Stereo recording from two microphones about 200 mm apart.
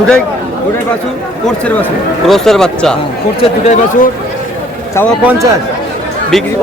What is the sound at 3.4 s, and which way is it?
Speech, 35° left (ahead or behind).